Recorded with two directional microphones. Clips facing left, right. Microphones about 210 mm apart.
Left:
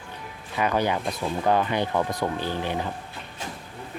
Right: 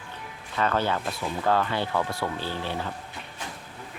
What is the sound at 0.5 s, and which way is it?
Speech, 15° left (ahead or behind).